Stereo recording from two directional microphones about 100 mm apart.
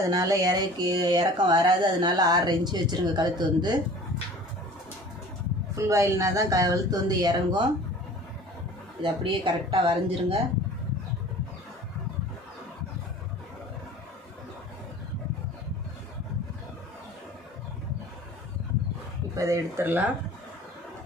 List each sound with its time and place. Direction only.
0.1 s speech: 40° right (ahead or behind)
5.7 s speech: 30° right (ahead or behind)
9.0 s speech: 55° right (ahead or behind)
19.4 s speech: 30° right (ahead or behind)
19.8 s speech: 20° right (ahead or behind)